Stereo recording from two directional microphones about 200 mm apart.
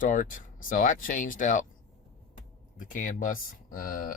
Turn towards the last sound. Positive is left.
turn(degrees=45)  # may be behind; listen again after turning